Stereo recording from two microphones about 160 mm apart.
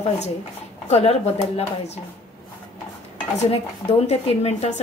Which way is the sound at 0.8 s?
40° left (ahead or behind).